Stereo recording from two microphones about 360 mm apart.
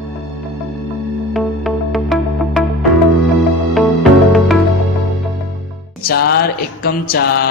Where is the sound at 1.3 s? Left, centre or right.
Centre.